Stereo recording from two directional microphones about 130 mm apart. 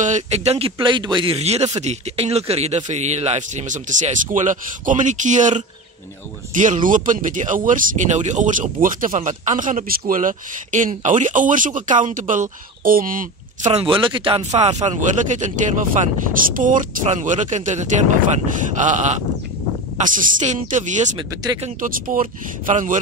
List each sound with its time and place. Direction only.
0.0 s speech: 65° right (ahead or behind)
8.8 s speech: 90° right; by 13.8 s 65° right (ahead or behind)
13.8 s speech: 40° right (ahead or behind)
14.5 s speech: 60° right (ahead or behind)
16.5 s speech: 85° right
21.8 s speech: 90° right